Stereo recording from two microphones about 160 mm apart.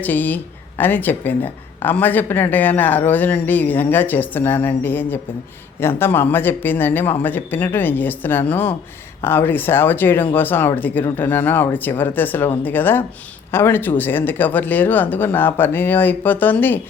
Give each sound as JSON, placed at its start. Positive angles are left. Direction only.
{"t": 0.0, "sound": "speech", "side_deg": 10}